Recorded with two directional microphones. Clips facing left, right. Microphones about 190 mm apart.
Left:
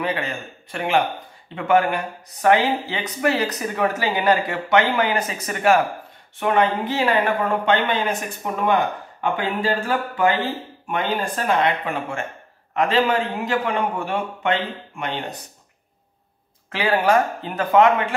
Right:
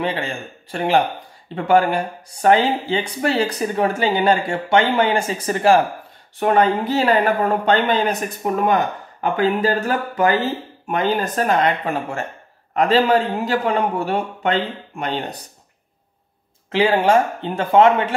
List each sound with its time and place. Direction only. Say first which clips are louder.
0.0 s speech: right 2 dB; 30° right (ahead or behind)
16.7 s speech: right 3 dB; 25° right (ahead or behind)